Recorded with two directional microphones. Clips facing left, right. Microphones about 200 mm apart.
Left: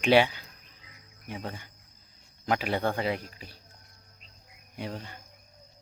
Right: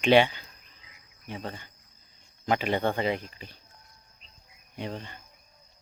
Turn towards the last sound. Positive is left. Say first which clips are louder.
# right 1 dB
turn(degrees=5)  # may be behind; listen again after turning